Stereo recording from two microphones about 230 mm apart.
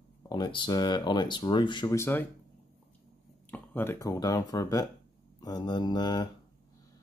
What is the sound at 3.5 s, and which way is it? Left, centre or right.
Speech, centre.